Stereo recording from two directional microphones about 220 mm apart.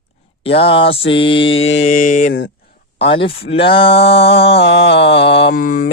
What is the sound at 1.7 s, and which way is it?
Mantra, 35° left (ahead or behind).